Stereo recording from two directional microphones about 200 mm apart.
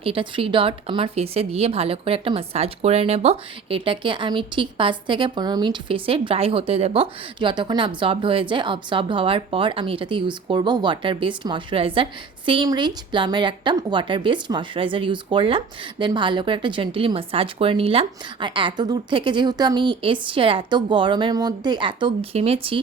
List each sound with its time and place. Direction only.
0.0 s a woman's voice: 25° right (ahead or behind)